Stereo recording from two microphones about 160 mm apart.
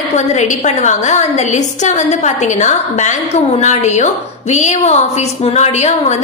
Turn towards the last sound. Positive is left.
turn(degrees=45)  # may be behind; listen again after turning